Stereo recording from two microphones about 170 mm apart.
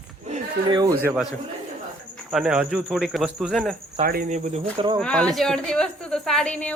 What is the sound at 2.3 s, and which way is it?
A woman's voice, 5° right (ahead or behind).